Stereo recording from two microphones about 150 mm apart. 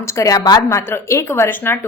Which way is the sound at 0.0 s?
20° left (ahead or behind).